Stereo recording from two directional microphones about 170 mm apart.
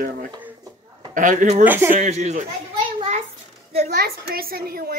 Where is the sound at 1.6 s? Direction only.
10° right (ahead or behind).